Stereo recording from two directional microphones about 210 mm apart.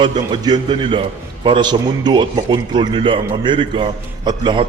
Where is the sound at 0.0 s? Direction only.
20° right (ahead or behind).